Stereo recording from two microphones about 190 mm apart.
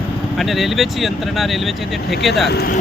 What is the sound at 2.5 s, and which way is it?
Speech, 55° left (ahead or behind).